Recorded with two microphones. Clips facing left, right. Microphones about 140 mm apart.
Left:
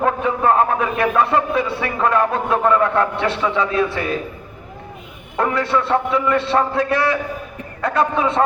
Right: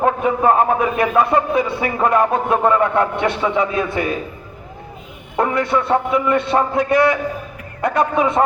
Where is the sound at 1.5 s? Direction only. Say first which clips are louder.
Right 2 dB; 15° right (ahead or behind).